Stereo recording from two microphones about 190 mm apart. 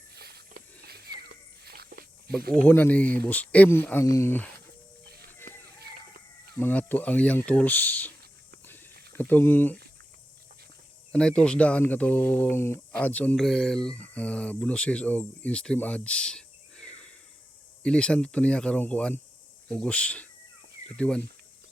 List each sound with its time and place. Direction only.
0.1 s wheeze: 55° right (ahead or behind)
2.5 s speech: 10° left (ahead or behind)
5.0 s a sound: 55° right (ahead or behind)
6.5 s speech: 10° left (ahead or behind)
8.6 s a sound: 10° left (ahead or behind)
9.1 s speech: 10° left (ahead or behind)
11.1 s speech: 5° left (ahead or behind)